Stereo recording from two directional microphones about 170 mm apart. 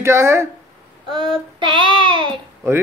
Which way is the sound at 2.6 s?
15° right (ahead or behind).